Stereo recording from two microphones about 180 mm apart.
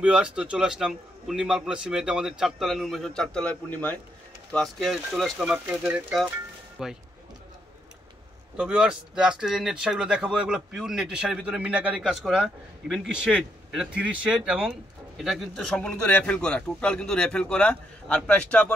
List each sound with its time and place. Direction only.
0.0 s speech: 5° right (ahead or behind)
8.5 s speech: 5° right (ahead or behind)